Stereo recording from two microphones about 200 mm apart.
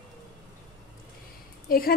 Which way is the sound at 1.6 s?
45° left (ahead or behind).